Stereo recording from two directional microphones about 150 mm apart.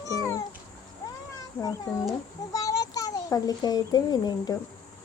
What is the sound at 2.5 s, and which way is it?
A child's voice, 25° left (ahead or behind).